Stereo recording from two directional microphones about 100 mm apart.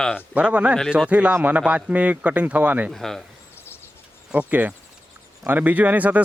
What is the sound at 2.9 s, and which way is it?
Speech, 5° left (ahead or behind).